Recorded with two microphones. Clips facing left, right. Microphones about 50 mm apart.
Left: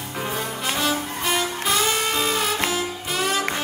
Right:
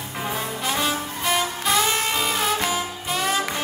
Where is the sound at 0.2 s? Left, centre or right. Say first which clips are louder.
Even; right; by 3.3 s centre.